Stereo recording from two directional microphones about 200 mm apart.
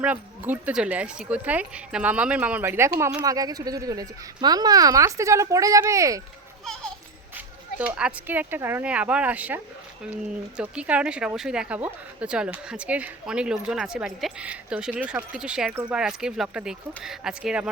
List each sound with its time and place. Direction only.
0.0 s speech: 5° right (ahead or behind)
7.3 s speech: 5° right (ahead or behind)
10.6 s speech: 5° right (ahead or behind)